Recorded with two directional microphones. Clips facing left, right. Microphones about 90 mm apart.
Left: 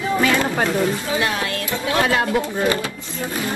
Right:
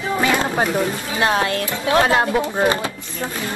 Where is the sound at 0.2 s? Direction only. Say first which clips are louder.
Right 2 dB; 25° right (ahead or behind).